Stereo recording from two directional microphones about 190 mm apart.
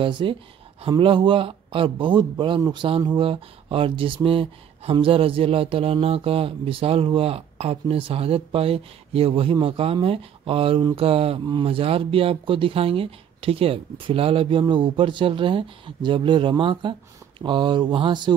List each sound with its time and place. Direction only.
0.0 s speech: 25° right (ahead or behind)